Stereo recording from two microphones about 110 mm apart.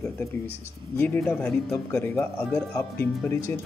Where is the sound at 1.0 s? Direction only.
10° left (ahead or behind).